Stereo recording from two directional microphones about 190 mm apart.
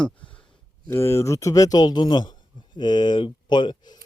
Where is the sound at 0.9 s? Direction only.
15° left (ahead or behind).